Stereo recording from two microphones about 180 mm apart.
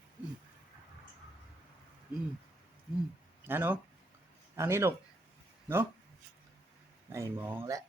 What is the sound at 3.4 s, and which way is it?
Speech, 10° right (ahead or behind).